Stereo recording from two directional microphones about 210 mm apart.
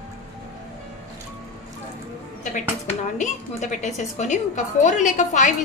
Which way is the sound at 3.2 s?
35° left (ahead or behind).